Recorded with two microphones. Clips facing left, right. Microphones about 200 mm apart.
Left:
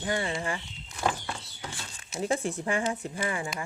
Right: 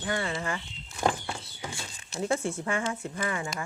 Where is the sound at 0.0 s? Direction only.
20° left (ahead or behind).